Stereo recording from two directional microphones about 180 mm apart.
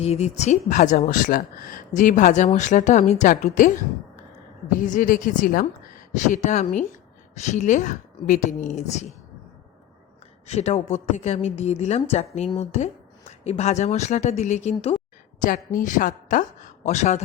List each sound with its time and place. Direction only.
0.0 s a woman's voice: 35° left (ahead or behind)
4.8 s a woman's voice: 45° left (ahead or behind)
10.4 s a woman's voice: 35° left (ahead or behind)
15.4 s a woman's voice: 50° left (ahead or behind)